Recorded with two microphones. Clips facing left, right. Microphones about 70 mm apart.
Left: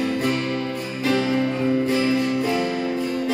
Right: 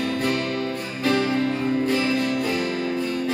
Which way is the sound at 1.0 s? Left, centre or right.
Right.